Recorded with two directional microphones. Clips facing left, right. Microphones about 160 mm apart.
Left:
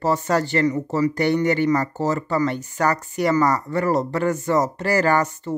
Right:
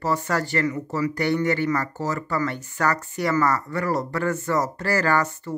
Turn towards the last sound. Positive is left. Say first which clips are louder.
# left 3 dB
turn(degrees=20)  # may be behind; listen again after turning